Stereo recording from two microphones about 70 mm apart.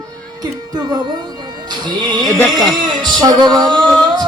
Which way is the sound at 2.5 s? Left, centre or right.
Centre.